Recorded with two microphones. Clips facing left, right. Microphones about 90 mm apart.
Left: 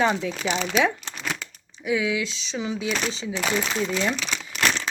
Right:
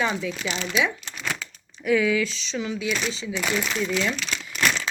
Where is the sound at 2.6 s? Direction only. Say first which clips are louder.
Left 1 dB; 25° left (ahead or behind).